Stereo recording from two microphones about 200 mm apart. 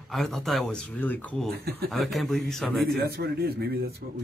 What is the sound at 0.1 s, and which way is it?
Speech, centre (ahead or behind).